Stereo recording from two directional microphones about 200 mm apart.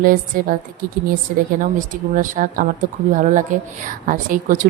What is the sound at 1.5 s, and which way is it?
Speech, 40° right (ahead or behind).